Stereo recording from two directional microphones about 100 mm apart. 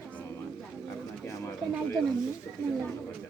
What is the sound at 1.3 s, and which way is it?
Speech, 30° left (ahead or behind).